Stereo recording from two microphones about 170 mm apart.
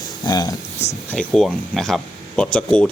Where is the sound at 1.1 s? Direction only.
5° left (ahead or behind).